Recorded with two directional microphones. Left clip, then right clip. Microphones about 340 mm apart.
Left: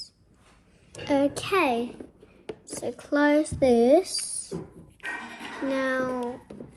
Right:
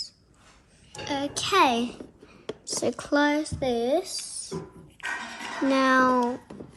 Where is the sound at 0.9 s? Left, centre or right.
Centre.